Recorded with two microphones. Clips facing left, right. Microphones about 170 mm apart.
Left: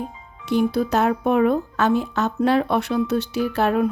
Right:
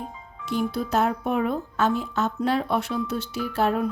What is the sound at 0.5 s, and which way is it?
Speech, 70° left (ahead or behind).